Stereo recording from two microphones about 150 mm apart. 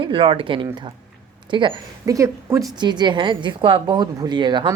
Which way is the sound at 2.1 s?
20° right (ahead or behind).